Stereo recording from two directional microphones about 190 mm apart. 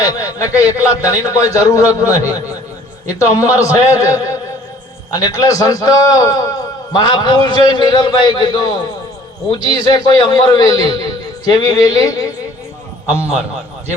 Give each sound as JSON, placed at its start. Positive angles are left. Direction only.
{"t": 0.0, "sound": "a man's voice", "side_deg": 20}
{"t": 0.8, "sound": "a man's voice", "side_deg": -10}
{"t": 1.1, "sound": "a man's voice", "side_deg": 15}